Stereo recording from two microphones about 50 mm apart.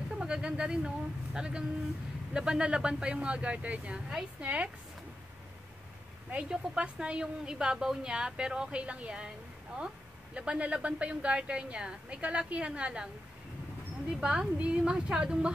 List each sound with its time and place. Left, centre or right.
0.1 s a woman's voice: centre
3.9 s a woman's voice: centre
4.4 s a woman's voice: right
6.3 s a woman's voice: centre
10.3 s a woman's voice: right
14.2 s a woman's voice: centre